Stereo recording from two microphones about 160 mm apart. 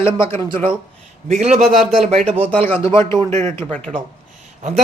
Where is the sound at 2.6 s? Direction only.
15° left (ahead or behind).